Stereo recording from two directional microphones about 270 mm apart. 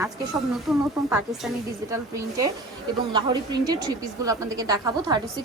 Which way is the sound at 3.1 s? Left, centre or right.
Centre.